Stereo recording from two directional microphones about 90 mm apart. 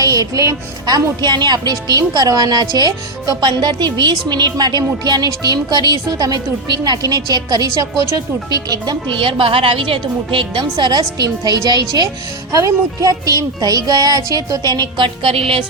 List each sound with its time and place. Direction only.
0.0 s a woman's voice: 40° right (ahead or behind); by 10.6 s 70° right (ahead or behind)
10.6 s a woman's voice: 50° right (ahead or behind)
12.5 s speech: 35° right (ahead or behind)
14.9 s a woman's voice: 70° right (ahead or behind); by 15.6 s 90° right